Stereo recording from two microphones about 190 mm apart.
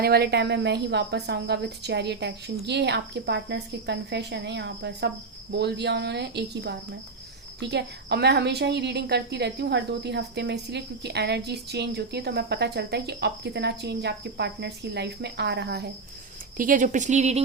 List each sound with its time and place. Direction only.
0.0 s a woman's voice: 60° right (ahead or behind)
16.6 s speech: 45° right (ahead or behind)